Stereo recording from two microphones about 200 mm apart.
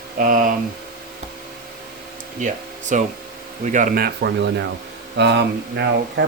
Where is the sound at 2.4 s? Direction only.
40° right (ahead or behind).